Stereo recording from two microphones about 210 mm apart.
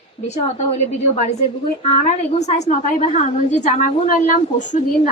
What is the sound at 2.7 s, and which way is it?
A woman's voice, 30° left (ahead or behind).